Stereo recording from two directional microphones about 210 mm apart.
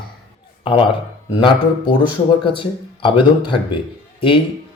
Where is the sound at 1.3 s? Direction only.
20° left (ahead or behind).